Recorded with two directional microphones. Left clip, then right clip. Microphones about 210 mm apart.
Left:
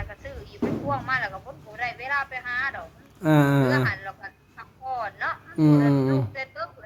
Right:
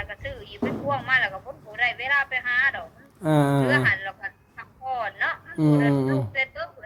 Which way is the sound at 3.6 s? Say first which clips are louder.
Right 3 dB; 15° right (ahead or behind).